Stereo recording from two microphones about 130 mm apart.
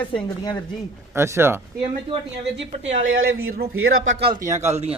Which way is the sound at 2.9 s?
90° right.